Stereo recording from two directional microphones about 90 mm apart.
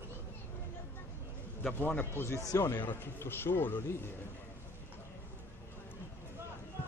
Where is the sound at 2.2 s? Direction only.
35° left (ahead or behind).